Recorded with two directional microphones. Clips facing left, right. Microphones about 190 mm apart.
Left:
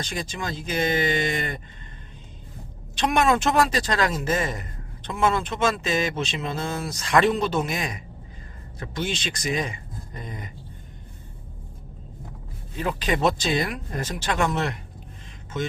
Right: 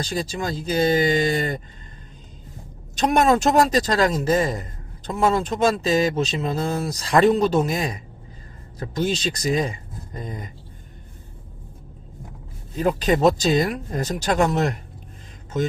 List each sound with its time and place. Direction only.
0.0 s speech: 35° right (ahead or behind)
2.9 s speech: 40° right (ahead or behind)
12.7 s speech: 40° right (ahead or behind)